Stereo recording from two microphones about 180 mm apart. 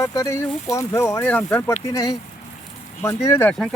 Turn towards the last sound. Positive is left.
turn(degrees=15)  # may be behind; listen again after turning